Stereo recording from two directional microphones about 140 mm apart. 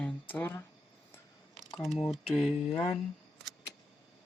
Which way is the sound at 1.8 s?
Centre (ahead or behind).